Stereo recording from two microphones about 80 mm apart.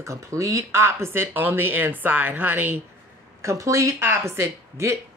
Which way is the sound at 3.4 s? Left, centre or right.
Right.